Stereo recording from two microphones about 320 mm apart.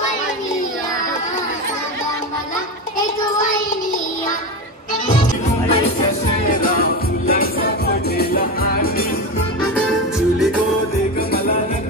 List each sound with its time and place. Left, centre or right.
5.0 s music: centre
9.8 s music: centre
11.1 s music: left